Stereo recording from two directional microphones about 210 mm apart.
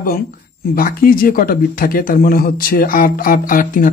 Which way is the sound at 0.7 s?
40° left (ahead or behind).